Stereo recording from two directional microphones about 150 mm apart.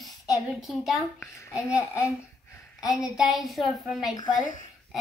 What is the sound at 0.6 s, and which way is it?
Speech, centre (ahead or behind).